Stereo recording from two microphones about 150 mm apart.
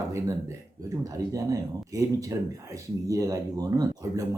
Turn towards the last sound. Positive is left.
turn(degrees=-20)  # may be behind; listen again after turning